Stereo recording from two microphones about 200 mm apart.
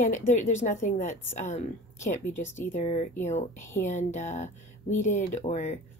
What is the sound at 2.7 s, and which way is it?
A woman's voice, 35° left (ahead or behind).